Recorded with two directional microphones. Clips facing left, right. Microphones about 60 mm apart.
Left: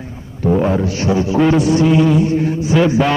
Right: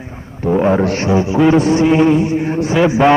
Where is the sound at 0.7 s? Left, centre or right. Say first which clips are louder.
Right 2 dB; right.